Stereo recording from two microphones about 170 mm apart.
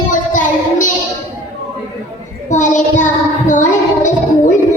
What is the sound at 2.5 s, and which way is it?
Child singing, 45° left (ahead or behind).